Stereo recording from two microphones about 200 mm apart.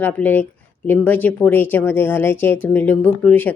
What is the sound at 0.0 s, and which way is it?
Speech, 10° left (ahead or behind).